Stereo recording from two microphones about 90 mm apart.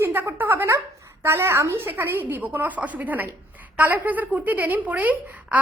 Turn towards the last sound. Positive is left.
turn(degrees=-20)  # may be behind; listen again after turning